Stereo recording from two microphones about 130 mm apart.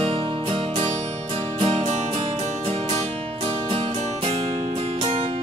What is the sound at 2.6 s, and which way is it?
Music, 55° right (ahead or behind).